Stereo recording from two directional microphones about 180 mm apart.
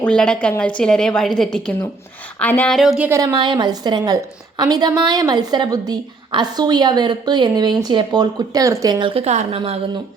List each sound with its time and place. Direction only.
0.0 s a woman's voice: 5° left (ahead or behind)
3.1 s a woman's voice: 20° right (ahead or behind)